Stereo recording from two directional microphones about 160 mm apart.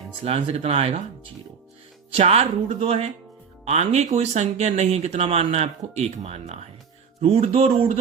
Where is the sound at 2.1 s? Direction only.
40° right (ahead or behind).